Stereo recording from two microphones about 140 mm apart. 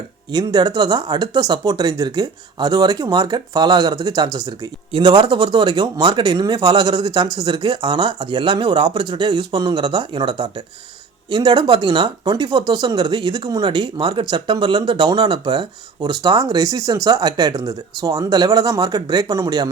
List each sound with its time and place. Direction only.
0.3 s speech: 30° right (ahead or behind)